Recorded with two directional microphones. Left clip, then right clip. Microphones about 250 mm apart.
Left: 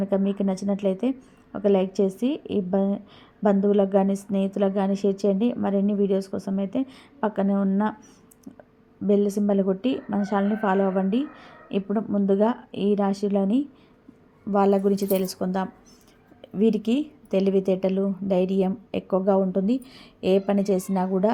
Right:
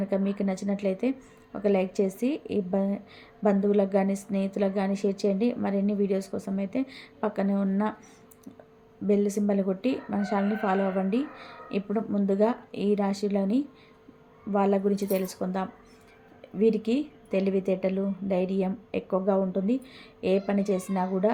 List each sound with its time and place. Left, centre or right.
0.3 s a woman's voice: centre
9.0 s a woman's voice: centre